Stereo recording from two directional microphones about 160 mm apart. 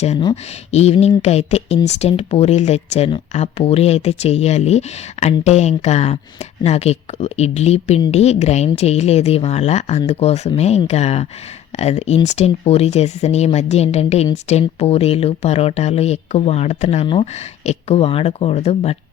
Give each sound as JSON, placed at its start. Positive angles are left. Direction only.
{"t": 0.7, "sound": "speech", "side_deg": 40}